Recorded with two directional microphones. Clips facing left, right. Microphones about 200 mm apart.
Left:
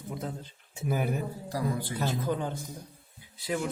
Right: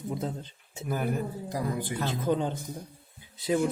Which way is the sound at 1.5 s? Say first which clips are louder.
Left 1 dB; 15° right (ahead or behind).